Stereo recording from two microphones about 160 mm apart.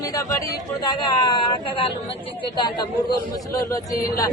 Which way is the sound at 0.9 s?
25° left (ahead or behind).